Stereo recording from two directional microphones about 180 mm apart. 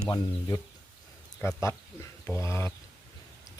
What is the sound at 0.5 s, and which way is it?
Speech, 25° left (ahead or behind).